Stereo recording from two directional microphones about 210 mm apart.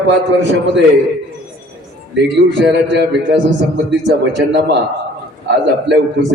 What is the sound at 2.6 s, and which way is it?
A man's voice, 55° right (ahead or behind).